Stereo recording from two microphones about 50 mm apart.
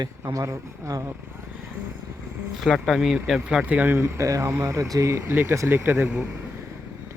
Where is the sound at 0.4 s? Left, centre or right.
Right.